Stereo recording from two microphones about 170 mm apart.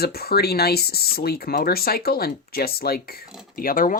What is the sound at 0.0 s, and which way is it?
Speech, 65° left (ahead or behind).